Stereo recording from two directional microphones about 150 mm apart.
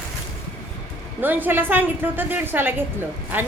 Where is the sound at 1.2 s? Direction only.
10° right (ahead or behind).